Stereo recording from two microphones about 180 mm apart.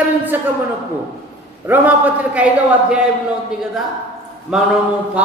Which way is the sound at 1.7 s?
10° right (ahead or behind).